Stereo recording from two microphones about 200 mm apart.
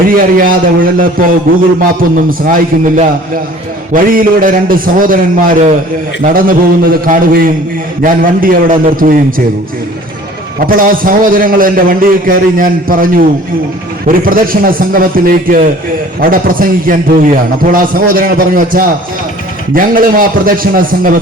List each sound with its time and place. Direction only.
0.1 s a man's voice: 45° right (ahead or behind)
10.6 s a man's voice: 45° right (ahead or behind)